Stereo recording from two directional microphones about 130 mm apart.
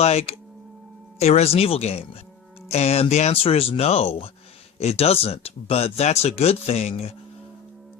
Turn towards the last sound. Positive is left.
turn(degrees=55)  # may be behind; listen again after turning